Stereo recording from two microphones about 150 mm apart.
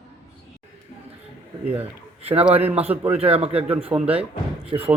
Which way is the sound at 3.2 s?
40° right (ahead or behind).